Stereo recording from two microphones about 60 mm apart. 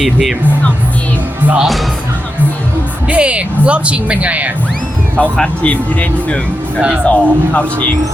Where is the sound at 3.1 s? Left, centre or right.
Centre.